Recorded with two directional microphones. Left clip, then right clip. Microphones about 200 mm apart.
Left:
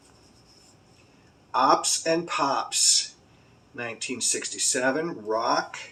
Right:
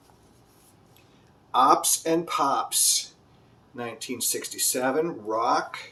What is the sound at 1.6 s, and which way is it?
Speech, 35° right (ahead or behind).